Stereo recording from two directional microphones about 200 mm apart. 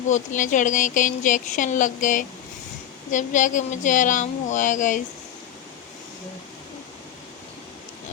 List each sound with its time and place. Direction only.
0.1 s speech: 40° left (ahead or behind)